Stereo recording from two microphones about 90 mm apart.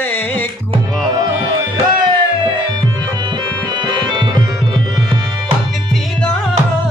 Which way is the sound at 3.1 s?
55° right (ahead or behind).